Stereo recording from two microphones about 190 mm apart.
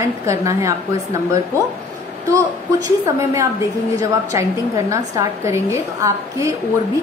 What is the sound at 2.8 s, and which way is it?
A woman's voice, 15° right (ahead or behind).